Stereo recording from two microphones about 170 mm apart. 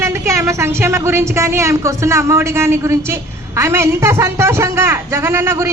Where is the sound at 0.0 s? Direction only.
15° right (ahead or behind).